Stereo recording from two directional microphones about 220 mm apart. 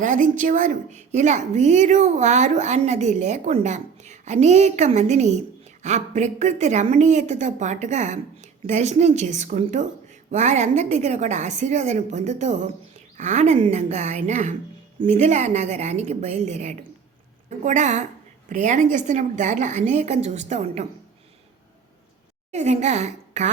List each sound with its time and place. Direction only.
0.0 s a woman's voice: 35° right (ahead or behind)
22.5 s a woman's voice: 30° right (ahead or behind)